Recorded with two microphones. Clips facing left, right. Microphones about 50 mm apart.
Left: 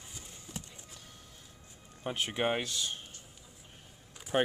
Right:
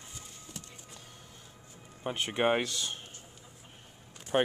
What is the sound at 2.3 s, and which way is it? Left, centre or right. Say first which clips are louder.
Speech: right 5 dB; centre.